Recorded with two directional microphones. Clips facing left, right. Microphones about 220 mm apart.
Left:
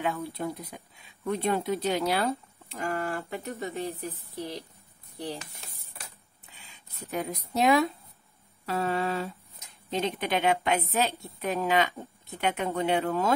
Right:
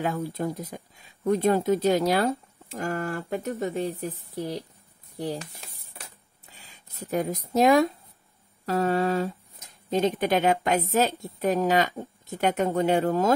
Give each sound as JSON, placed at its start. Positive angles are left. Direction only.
{"t": 0.0, "sound": "speech", "side_deg": -40}